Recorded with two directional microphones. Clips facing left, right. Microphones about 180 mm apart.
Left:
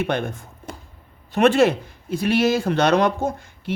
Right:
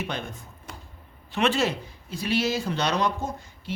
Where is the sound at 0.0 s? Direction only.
55° left (ahead or behind).